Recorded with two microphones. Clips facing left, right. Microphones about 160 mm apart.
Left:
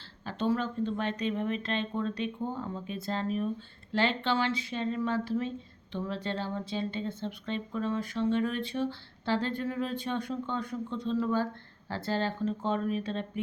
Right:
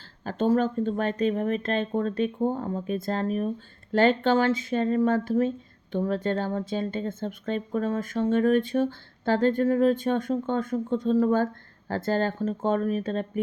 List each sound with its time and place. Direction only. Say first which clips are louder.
0.3 s speech: right 7 dB; 45° right (ahead or behind)